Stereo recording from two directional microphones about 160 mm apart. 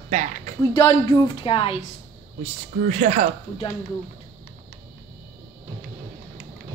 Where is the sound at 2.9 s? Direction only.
45° right (ahead or behind).